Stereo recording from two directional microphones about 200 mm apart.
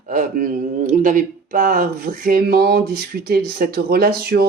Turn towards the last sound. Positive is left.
turn(degrees=-50)  # may be behind; listen again after turning